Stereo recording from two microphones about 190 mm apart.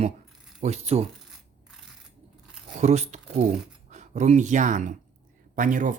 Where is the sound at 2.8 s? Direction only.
35° right (ahead or behind).